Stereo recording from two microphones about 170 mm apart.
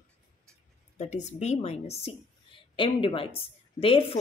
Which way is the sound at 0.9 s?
40° left (ahead or behind).